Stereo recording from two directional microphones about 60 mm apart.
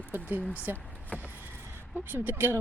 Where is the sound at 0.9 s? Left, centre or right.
Left.